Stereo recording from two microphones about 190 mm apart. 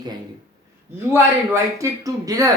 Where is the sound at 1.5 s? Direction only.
15° right (ahead or behind).